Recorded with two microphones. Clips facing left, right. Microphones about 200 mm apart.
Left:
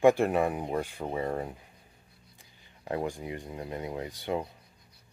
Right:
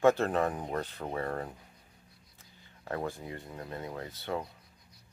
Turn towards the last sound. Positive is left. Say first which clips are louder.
# left 4 dB
turn(degrees=15)  # may be behind; listen again after turning